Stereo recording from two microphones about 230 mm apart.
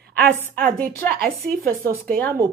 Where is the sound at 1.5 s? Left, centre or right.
Right.